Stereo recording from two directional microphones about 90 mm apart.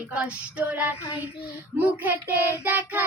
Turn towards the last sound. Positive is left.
turn(degrees=-20)  # may be behind; listen again after turning